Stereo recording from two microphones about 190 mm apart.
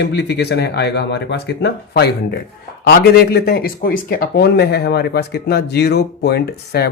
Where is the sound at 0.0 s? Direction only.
60° left (ahead or behind).